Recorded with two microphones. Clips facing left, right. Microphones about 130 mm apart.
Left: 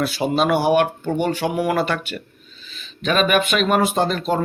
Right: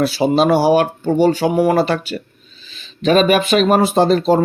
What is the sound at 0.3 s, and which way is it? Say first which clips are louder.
Speech: right 3 dB; 30° right (ahead or behind).